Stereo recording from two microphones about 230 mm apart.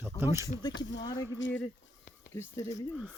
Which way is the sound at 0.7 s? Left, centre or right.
Left.